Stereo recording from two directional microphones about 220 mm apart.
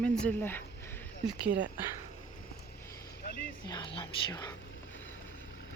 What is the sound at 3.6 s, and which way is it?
Speech, 20° left (ahead or behind).